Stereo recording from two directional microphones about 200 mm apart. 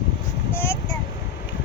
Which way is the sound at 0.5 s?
10° left (ahead or behind).